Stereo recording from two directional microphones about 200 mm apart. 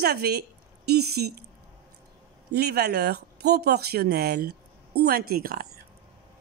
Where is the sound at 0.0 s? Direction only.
55° right (ahead or behind).